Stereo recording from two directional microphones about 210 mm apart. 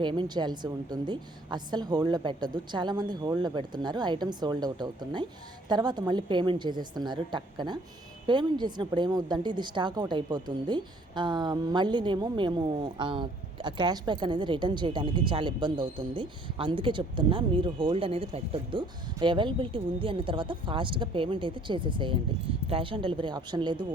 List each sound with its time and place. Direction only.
0.0 s a woman's voice: 20° right (ahead or behind)